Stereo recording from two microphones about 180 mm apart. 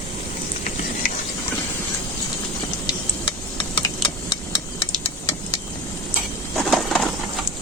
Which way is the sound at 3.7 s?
25° left (ahead or behind).